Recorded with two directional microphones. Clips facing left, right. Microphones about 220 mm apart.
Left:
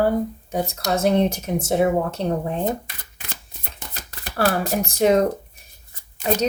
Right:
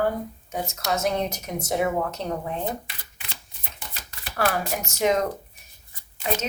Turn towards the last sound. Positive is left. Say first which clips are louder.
# left 7 dB
turn(degrees=40)  # may be behind; listen again after turning